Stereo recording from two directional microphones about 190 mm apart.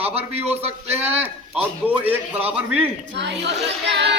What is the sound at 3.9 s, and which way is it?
Music, 65° right (ahead or behind).